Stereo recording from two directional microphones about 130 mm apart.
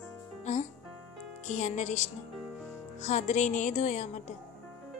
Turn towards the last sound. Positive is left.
turn(degrees=70)  # may be behind; listen again after turning